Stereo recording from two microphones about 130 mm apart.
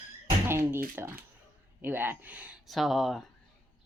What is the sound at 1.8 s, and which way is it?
Speech, 15° right (ahead or behind).